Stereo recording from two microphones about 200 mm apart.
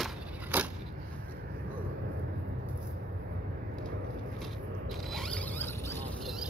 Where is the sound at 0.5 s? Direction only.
10° right (ahead or behind).